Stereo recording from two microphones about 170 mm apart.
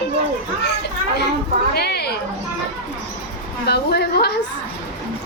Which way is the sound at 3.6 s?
75° left (ahead or behind).